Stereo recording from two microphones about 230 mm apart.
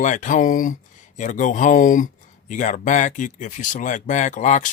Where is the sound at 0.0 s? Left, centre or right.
Left.